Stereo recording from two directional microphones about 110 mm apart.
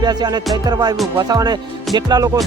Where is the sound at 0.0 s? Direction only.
40° right (ahead or behind).